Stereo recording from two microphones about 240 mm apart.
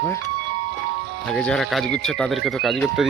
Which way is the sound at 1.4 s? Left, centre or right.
Centre.